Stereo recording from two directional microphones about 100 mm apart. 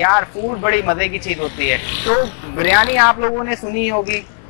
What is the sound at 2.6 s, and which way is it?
Speech, 20° left (ahead or behind).